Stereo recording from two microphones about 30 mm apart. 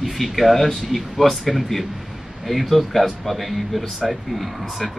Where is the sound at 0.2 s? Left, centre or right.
Centre.